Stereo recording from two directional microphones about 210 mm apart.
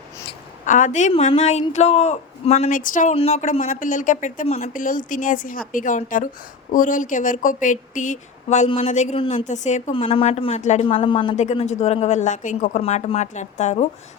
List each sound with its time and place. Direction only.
0.6 s speech: 35° left (ahead or behind)